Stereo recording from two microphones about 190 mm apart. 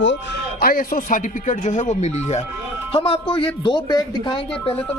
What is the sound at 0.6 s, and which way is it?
Speech, 50° left (ahead or behind).